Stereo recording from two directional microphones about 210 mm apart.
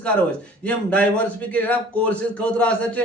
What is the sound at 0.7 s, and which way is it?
A man's voice, 5° left (ahead or behind).